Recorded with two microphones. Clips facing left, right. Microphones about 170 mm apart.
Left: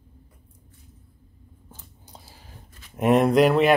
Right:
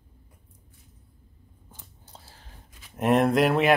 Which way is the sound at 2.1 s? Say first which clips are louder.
Left 3 dB; 10° left (ahead or behind).